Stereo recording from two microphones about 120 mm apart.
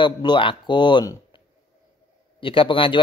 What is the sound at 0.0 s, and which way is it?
Speech, 40° left (ahead or behind).